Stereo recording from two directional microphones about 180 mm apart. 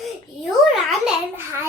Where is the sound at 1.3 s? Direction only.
15° right (ahead or behind).